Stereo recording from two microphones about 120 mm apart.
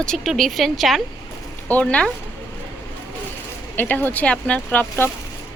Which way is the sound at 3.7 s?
15° left (ahead or behind).